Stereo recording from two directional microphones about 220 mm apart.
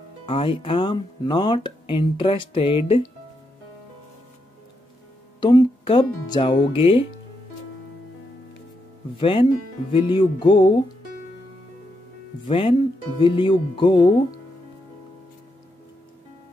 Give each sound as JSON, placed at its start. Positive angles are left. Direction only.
{"t": 0.3, "sound": "speech", "side_deg": 25}
{"t": 5.4, "sound": "speech", "side_deg": 20}
{"t": 9.2, "sound": "speech", "side_deg": 25}
{"t": 12.4, "sound": "speech", "side_deg": 25}